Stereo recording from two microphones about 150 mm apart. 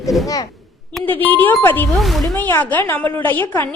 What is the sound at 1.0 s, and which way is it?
Speech, 10° left (ahead or behind).